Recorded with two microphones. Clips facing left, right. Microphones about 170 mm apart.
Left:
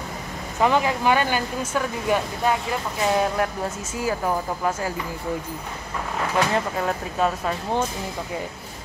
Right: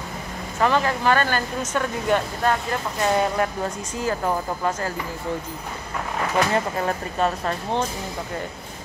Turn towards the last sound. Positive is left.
turn(degrees=5)  # may be behind; listen again after turning